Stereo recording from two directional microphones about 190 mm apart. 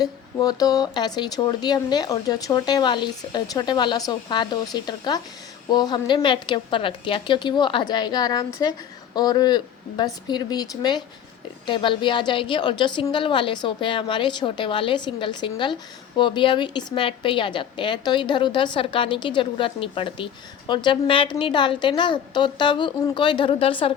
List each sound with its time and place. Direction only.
0.0 s a woman's voice: 20° left (ahead or behind)